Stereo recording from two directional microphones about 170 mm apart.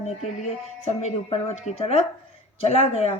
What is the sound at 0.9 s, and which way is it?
Speech, 40° left (ahead or behind).